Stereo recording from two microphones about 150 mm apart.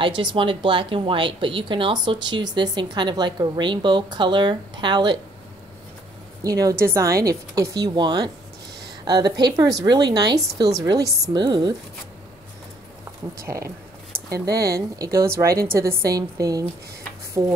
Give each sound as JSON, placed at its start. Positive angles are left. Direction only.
{"t": 0.0, "sound": "a woman's voice", "side_deg": -35}
{"t": 6.4, "sound": "a woman's voice", "side_deg": -25}
{"t": 13.3, "sound": "a woman's voice", "side_deg": -20}